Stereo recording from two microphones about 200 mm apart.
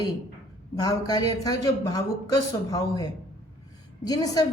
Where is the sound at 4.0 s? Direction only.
20° left (ahead or behind).